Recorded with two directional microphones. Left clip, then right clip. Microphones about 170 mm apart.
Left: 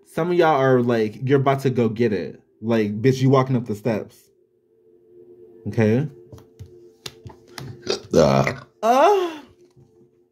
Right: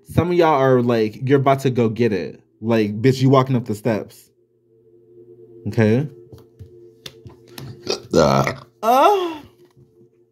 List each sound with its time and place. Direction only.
0.1 s speech: 15° right (ahead or behind)
5.6 s speech: 15° right (ahead or behind)
7.0 s music: 40° left (ahead or behind)
7.8 s burping: 10° right (ahead or behind)